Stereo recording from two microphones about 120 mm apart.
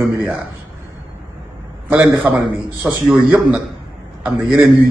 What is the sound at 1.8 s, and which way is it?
A man's voice, 15° right (ahead or behind).